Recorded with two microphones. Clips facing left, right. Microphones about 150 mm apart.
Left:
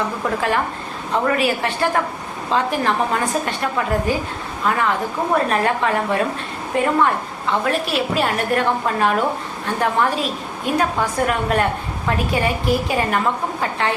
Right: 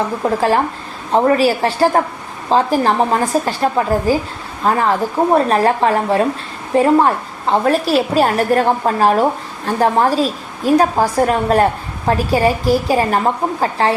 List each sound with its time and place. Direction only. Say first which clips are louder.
0.3 s a woman's voice: right 6 dB; 35° right (ahead or behind)